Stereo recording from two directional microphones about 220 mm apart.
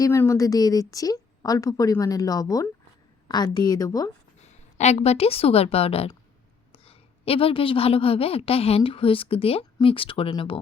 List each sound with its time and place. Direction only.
0.0 s a woman's voice: 15° left (ahead or behind)
4.4 s a woman's voice: 30° left (ahead or behind)